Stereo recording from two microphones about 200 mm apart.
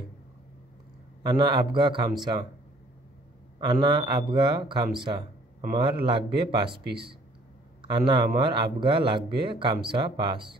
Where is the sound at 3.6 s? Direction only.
20° right (ahead or behind).